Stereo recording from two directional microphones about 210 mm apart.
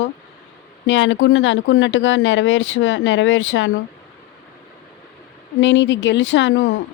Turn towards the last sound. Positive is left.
turn(degrees=65)  # may be behind; listen again after turning